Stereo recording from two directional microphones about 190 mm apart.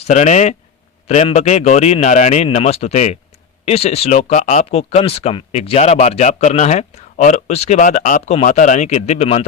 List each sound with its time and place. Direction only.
0.1 s speech: 40° left (ahead or behind)